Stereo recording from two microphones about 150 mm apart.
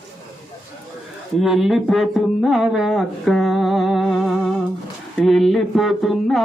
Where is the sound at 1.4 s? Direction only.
Centre (ahead or behind).